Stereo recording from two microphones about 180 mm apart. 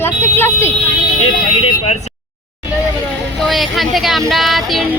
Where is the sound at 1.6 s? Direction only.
35° left (ahead or behind).